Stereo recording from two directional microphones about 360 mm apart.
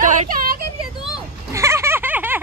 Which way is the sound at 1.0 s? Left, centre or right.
Centre.